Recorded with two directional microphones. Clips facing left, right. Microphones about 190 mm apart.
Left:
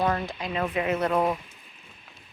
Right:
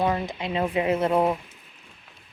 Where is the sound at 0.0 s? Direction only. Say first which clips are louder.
Right 2 dB; 20° right (ahead or behind).